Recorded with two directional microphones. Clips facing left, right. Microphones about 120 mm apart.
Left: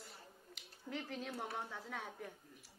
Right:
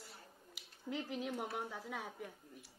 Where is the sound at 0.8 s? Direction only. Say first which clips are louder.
Right 3 dB; 15° right (ahead or behind).